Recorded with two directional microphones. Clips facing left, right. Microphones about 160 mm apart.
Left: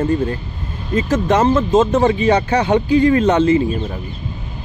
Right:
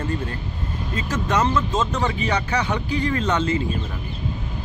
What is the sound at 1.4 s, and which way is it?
Speech, 50° left (ahead or behind).